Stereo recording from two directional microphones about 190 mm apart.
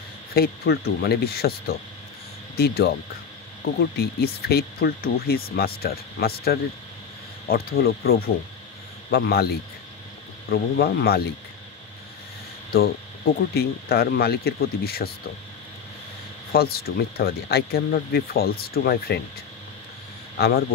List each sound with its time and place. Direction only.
0.3 s speech: 55° left (ahead or behind)
12.7 s speech: 50° left (ahead or behind)
16.5 s speech: 55° left (ahead or behind)
20.3 s speech: 55° left (ahead or behind)